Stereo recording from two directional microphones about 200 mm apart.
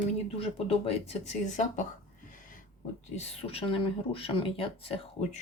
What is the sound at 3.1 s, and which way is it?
Speech, 30° left (ahead or behind).